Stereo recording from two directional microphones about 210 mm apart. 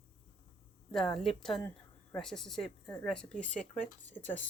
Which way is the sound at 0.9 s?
Centre (ahead or behind).